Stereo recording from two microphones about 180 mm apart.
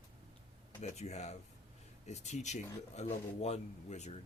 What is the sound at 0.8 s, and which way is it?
A man's voice, 40° left (ahead or behind).